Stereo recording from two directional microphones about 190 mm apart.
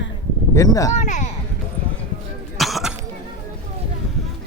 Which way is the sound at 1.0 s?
40° left (ahead or behind).